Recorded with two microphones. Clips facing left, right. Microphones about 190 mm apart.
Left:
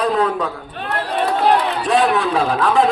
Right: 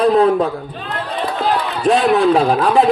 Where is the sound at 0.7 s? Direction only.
60° left (ahead or behind).